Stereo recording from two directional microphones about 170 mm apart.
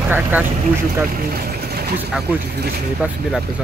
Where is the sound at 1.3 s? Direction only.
65° right (ahead or behind).